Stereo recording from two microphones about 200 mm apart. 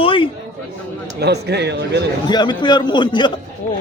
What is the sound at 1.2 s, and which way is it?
Speech, 55° right (ahead or behind).